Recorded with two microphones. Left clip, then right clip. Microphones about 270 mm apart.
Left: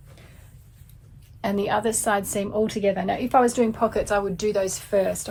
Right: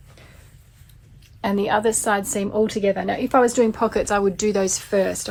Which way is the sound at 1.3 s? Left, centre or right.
Right.